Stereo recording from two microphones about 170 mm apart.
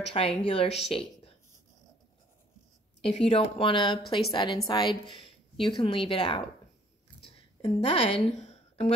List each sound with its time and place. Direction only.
0.0 s speech: 35° left (ahead or behind)
3.0 s a woman's voice: 35° left (ahead or behind)
7.6 s a woman's voice: 35° left (ahead or behind)